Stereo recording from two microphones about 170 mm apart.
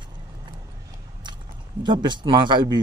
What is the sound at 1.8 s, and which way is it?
Speech, 25° right (ahead or behind).